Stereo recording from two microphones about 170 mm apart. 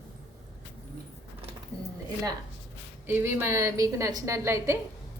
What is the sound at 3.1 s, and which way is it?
A woman's voice, 15° right (ahead or behind).